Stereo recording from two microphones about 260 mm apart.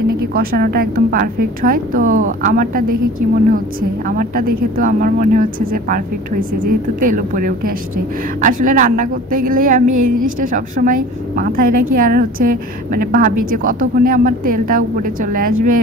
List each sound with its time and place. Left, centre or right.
0.3 s a woman's voice: right